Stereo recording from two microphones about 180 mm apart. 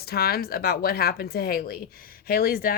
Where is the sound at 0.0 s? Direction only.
60° left (ahead or behind).